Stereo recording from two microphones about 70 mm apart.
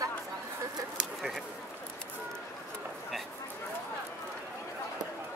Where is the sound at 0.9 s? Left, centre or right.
Centre.